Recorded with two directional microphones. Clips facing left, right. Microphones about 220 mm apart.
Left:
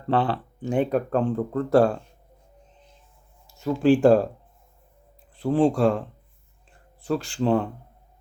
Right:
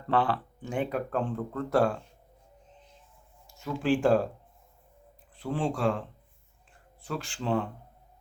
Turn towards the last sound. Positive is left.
turn(degrees=40)  # may be behind; listen again after turning